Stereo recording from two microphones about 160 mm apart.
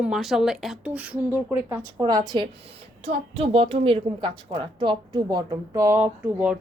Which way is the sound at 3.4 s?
35° right (ahead or behind).